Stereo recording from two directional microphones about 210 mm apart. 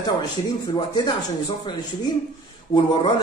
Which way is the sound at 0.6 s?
20° left (ahead or behind).